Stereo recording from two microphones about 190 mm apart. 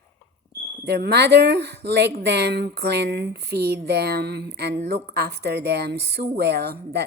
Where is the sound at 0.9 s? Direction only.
60° right (ahead or behind).